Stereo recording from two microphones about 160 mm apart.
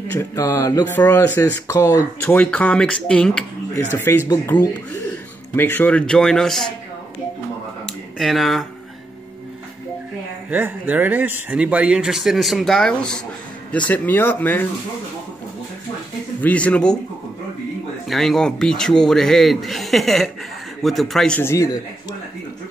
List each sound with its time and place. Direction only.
0.1 s speech: 15° left (ahead or behind)
4.3 s speech: 25° left (ahead or behind)
5.6 s speech: 10° left (ahead or behind)
7.8 s a sound: centre (ahead or behind)
10.5 s speech: 10° right (ahead or behind); by 14.7 s 10° left (ahead or behind)
16.4 s speech: 10° left (ahead or behind)
18.0 s speech: centre (ahead or behind)
21.4 s speech: 15° left (ahead or behind)